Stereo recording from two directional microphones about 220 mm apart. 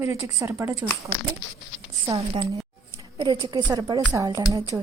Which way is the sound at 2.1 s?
25° right (ahead or behind).